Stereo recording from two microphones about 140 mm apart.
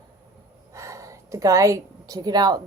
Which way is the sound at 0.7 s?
20° right (ahead or behind).